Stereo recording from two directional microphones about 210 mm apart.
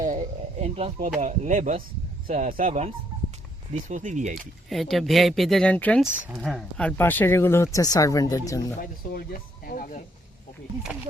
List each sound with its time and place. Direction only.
0.0 s a sound: 35° right (ahead or behind)
1.2 s speech: 35° right (ahead or behind)
4.7 s speech: centre (ahead or behind); by 8.7 s 15° left (ahead or behind)
8.8 s speech: 45° left (ahead or behind)